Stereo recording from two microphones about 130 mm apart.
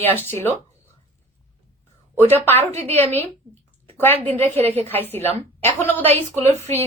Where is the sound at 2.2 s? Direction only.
15° left (ahead or behind).